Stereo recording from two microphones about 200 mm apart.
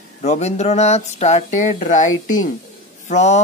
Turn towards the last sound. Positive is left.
turn(degrees=35)  # may be behind; listen again after turning